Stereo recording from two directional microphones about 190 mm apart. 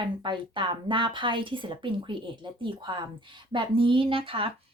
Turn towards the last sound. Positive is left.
turn(degrees=-30)  # may be behind; listen again after turning